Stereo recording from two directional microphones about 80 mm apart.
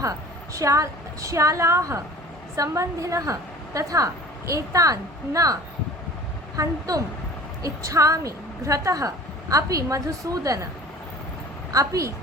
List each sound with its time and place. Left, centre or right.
0.0 s a woman's voice: right
6.6 s a woman's voice: right
11.7 s a woman's voice: right